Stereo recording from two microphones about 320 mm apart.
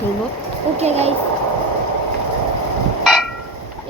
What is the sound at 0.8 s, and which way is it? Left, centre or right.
Speech, centre.